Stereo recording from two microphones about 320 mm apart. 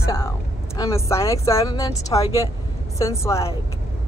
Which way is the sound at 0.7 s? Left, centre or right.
Centre.